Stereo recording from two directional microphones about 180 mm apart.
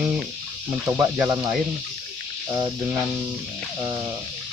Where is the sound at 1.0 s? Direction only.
15° right (ahead or behind).